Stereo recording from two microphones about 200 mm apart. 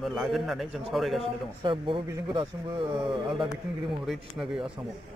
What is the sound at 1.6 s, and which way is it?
Speech, 25° right (ahead or behind).